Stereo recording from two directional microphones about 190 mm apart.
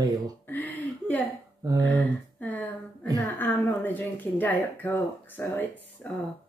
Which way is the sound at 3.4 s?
10° left (ahead or behind).